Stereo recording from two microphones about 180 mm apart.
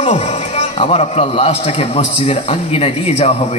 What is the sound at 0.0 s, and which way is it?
A man's voice, 40° left (ahead or behind).